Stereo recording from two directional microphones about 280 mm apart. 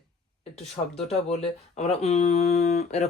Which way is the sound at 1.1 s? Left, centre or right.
Left.